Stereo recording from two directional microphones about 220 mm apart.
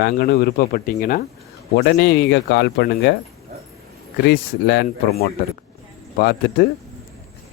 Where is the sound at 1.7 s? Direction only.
50° left (ahead or behind).